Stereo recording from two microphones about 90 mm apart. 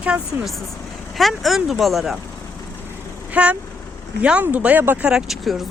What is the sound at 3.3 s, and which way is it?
Speech, 15° right (ahead or behind).